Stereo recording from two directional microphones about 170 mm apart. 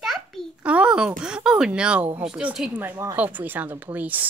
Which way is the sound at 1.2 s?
5° right (ahead or behind).